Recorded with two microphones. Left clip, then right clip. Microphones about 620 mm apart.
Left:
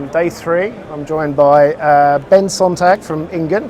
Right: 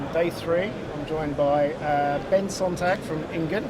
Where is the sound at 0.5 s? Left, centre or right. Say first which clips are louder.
Left 9 dB; left.